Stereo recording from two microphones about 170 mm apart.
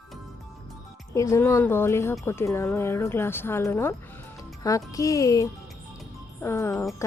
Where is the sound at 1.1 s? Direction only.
20° left (ahead or behind).